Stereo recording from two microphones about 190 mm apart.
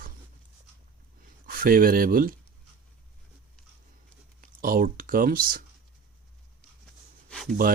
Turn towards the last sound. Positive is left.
turn(degrees=0)  # may be behind; listen again after turning